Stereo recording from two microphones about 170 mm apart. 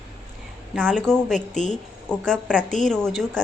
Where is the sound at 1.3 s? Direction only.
45° left (ahead or behind).